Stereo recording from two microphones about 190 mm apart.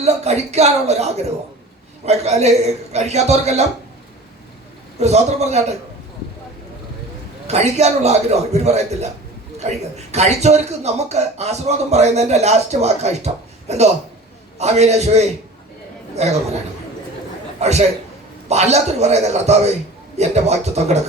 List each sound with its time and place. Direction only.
0.0 s a man's voice: 35° right (ahead or behind)
4.9 s a man's voice: 35° right (ahead or behind)
7.4 s a man's voice: 35° right (ahead or behind)
17.6 s a man's voice: 35° right (ahead or behind)